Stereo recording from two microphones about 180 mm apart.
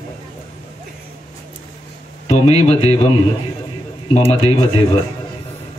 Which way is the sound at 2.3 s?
35° left (ahead or behind).